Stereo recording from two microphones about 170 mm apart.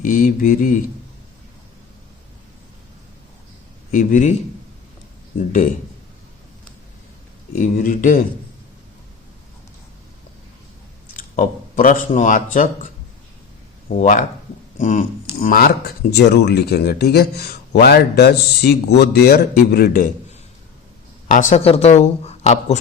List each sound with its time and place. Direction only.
0.0 s speech: 55° left (ahead or behind)
3.9 s speech: 45° left (ahead or behind)
5.5 s speech: 50° left (ahead or behind)
7.5 s speech: 50° left (ahead or behind)
11.3 s speech: 50° left (ahead or behind)
14.0 s speech: 50° left (ahead or behind)
16.1 s a man's voice: 75° left (ahead or behind)
21.2 s speech: 50° left (ahead or behind)
21.6 s speech: 35° left (ahead or behind)